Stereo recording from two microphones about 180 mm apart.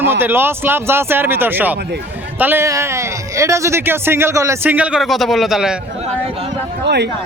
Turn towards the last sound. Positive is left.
turn(degrees=-70)  # may be behind; listen again after turning